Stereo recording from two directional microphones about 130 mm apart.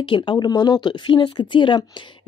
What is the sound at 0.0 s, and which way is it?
Speech, 40° left (ahead or behind).